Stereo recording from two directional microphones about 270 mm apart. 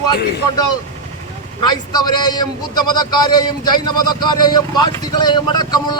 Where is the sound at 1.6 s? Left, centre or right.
Centre.